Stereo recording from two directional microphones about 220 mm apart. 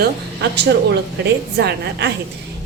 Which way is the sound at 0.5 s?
50° right (ahead or behind).